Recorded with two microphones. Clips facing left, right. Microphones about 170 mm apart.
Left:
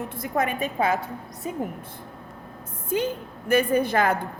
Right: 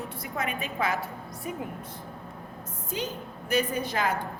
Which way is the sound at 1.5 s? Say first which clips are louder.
Left 4 dB; 25° left (ahead or behind).